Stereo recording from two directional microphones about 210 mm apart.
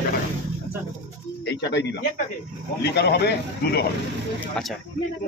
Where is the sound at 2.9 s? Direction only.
50° left (ahead or behind).